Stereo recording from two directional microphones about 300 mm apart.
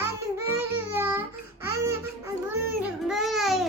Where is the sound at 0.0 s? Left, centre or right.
Centre.